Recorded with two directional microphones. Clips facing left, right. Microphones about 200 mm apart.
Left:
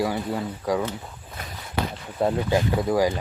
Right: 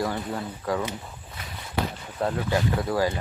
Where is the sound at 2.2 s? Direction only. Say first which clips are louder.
Left 3 dB; 20° left (ahead or behind).